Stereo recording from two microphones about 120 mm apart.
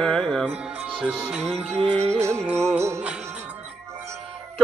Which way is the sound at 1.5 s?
60° right (ahead or behind).